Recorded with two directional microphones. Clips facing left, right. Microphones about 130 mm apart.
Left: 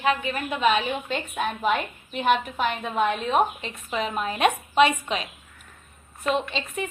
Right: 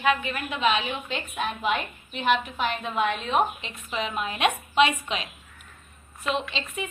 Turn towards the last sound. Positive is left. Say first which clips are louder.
# left 3 dB
turn(degrees=45)  # may be behind; listen again after turning